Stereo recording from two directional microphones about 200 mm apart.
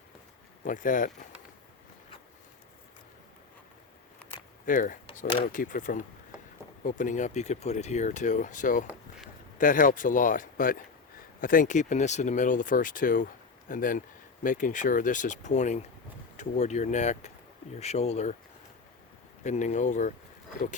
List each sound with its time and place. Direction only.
0.6 s speech: 40° left (ahead or behind)
4.6 s speech: 40° left (ahead or behind)
8.9 s a sound: centre (ahead or behind)
9.6 s speech: 40° left (ahead or behind)
19.5 s speech: 35° left (ahead or behind)